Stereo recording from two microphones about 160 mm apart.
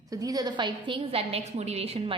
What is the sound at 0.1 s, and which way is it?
A woman's voice, 20° right (ahead or behind).